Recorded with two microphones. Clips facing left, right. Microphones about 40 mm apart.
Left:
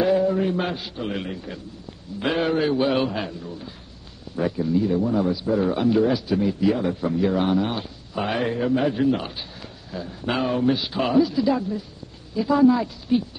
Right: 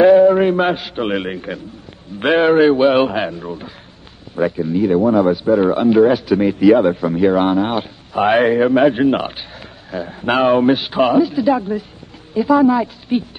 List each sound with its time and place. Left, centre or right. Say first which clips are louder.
0.0 s a man's voice: right 11 dB; right
4.4 s a woman's voice: right 6 dB; right
4.7 s a man's voice: right 9 dB; right
6.2 s a man's voice: right 9 dB; right
8.7 s speech: right 9 dB; right
9.3 s speech: right 3 dB; right
11.1 s a woman's voice: right 5 dB; right